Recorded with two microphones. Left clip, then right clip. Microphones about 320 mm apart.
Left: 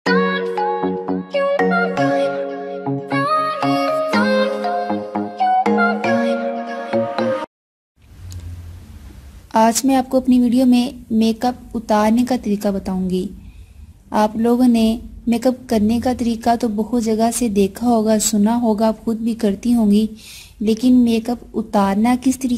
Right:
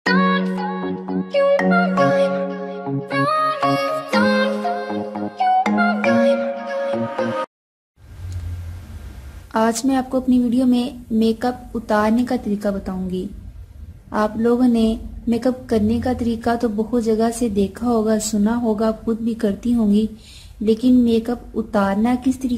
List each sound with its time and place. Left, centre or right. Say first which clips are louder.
0.0 s music: left 1 dB; centre
9.5 s a woman's voice: left 4 dB; left